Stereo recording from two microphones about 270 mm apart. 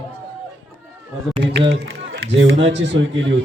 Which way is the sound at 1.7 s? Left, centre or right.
Right.